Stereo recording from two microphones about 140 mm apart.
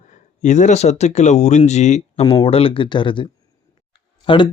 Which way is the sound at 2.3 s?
40° left (ahead or behind).